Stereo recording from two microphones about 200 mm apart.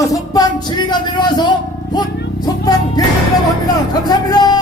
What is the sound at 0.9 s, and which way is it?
Speech, 20° left (ahead or behind).